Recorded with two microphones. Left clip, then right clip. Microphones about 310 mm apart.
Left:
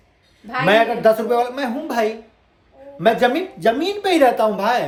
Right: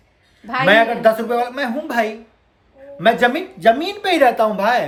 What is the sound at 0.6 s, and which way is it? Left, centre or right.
A woman's voice, centre.